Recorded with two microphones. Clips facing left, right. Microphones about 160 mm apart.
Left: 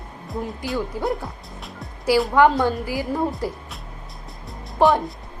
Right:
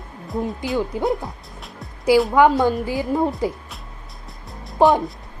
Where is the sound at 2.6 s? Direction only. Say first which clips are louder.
Right 3 dB; 20° right (ahead or behind).